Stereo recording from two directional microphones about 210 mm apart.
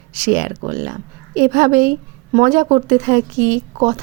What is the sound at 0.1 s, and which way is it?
A woman's voice, 40° right (ahead or behind).